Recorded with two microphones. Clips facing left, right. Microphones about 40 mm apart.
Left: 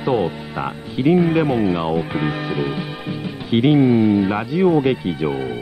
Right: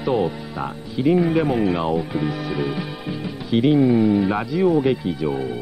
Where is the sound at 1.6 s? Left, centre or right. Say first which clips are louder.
Left 1 dB; centre.